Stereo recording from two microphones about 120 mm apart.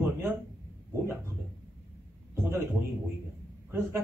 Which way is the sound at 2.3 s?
20° right (ahead or behind).